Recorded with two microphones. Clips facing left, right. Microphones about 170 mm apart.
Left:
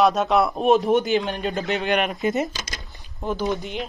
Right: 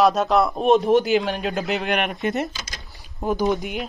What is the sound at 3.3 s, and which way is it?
Speech, 15° right (ahead or behind).